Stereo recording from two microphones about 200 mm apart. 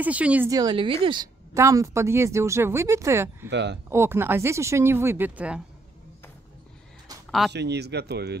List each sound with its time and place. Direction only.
0.0 s speech: 5° right (ahead or behind)
3.4 s speech: 60° right (ahead or behind)
3.9 s speech: 10° right (ahead or behind)
7.2 s speech: centre (ahead or behind)
7.5 s speech: 55° right (ahead or behind)